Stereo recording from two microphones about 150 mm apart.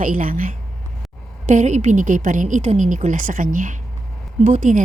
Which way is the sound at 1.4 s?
55° right (ahead or behind).